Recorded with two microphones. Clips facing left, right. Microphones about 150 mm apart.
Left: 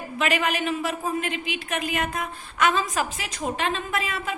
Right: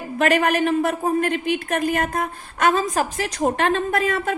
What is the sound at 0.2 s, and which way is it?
A woman's voice, 55° right (ahead or behind).